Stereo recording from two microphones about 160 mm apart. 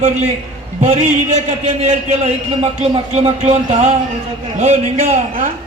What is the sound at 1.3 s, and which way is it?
A man's voice, 45° right (ahead or behind).